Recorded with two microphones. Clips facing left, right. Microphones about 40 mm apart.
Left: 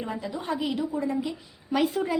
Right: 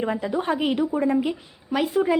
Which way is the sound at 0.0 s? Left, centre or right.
Right.